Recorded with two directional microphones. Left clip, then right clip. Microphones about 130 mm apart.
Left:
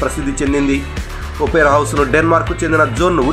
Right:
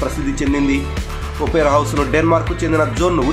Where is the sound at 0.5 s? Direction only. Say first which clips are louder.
Left 2 dB; 15° left (ahead or behind).